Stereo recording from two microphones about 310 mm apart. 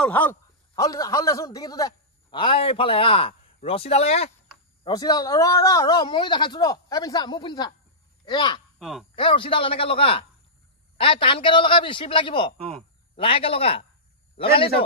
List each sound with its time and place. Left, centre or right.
0.0 s a man's voice: centre
8.7 s speech: centre
9.1 s a man's voice: centre